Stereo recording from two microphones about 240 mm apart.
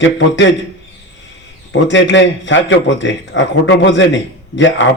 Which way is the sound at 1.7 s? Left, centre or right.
Left.